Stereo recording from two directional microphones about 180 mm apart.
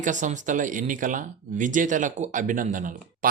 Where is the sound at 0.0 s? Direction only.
45° right (ahead or behind).